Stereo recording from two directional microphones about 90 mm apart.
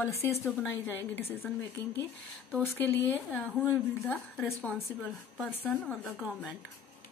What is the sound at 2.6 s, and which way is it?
A woman's voice, 25° left (ahead or behind).